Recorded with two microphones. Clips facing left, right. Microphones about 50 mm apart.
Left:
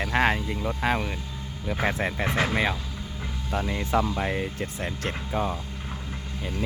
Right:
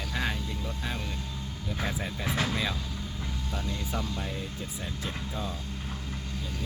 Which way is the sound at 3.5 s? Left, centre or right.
Left.